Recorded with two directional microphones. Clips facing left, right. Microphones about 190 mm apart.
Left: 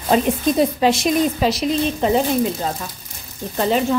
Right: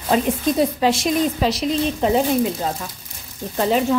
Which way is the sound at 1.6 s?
5° right (ahead or behind).